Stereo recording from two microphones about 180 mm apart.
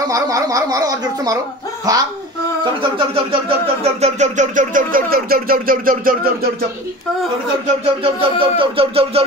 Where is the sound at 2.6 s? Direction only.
25° right (ahead or behind).